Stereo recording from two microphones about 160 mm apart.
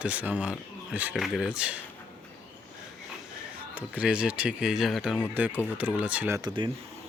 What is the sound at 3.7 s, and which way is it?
Speech, 10° right (ahead or behind).